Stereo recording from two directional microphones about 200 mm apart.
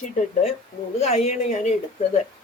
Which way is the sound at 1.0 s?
30° left (ahead or behind).